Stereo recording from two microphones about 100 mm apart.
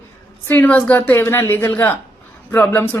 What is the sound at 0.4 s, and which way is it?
A woman's voice, 20° left (ahead or behind).